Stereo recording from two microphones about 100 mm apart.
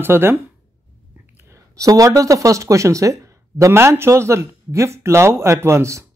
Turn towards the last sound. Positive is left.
turn(degrees=-30)  # may be behind; listen again after turning